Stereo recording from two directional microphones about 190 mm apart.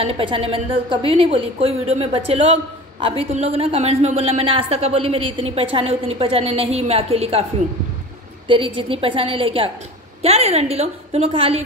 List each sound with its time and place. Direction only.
0.0 s a woman's voice: 30° right (ahead or behind)
8.5 s a woman's voice: 25° right (ahead or behind)